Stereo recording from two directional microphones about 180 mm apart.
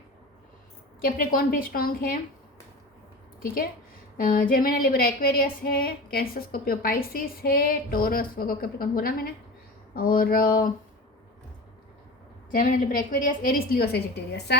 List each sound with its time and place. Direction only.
1.0 s speech: 50° left (ahead or behind)
3.4 s a woman's voice: 55° left (ahead or behind)
12.5 s speech: 50° left (ahead or behind); by 14.6 s 65° left (ahead or behind)